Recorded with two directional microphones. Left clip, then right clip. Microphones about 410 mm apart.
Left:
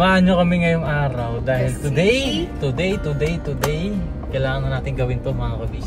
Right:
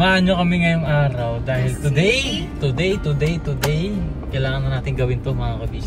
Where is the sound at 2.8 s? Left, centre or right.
Centre.